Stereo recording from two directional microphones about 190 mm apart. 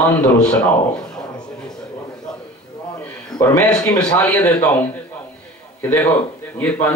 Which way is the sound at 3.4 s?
20° left (ahead or behind).